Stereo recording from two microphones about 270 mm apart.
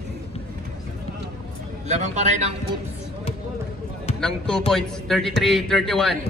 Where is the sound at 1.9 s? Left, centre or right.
Right.